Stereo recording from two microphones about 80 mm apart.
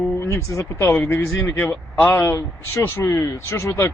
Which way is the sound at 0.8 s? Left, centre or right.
Left.